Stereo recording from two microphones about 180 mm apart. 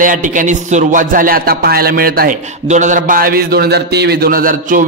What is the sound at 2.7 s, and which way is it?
A man's voice, 45° right (ahead or behind).